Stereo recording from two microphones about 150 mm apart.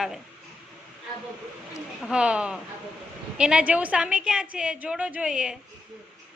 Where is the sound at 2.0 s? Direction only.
5° right (ahead or behind).